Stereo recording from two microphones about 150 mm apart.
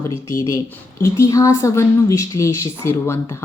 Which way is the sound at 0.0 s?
20° left (ahead or behind).